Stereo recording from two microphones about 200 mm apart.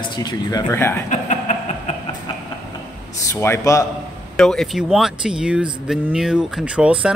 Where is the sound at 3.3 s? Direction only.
15° left (ahead or behind).